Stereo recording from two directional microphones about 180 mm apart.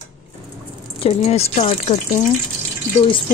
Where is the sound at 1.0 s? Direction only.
35° left (ahead or behind).